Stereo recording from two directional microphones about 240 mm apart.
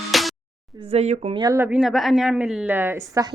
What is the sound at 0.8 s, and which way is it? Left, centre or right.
A woman's voice, right.